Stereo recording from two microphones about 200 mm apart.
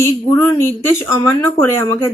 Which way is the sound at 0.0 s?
10° left (ahead or behind).